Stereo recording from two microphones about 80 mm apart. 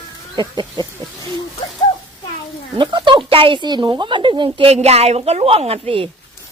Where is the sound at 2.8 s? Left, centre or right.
Right.